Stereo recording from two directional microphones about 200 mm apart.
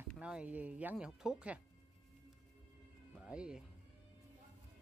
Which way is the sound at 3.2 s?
5° right (ahead or behind).